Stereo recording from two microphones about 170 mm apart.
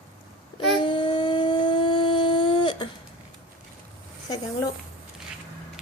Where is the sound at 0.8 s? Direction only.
30° left (ahead or behind).